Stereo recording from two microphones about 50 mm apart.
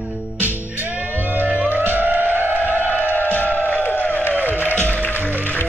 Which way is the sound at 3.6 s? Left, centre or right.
Left.